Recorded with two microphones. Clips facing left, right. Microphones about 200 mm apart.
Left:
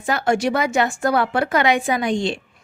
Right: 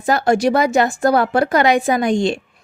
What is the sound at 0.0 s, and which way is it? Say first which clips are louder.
A woman's voice: right 4 dB; 35° right (ahead or behind).